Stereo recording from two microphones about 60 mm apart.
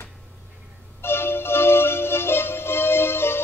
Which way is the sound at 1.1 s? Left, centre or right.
Left.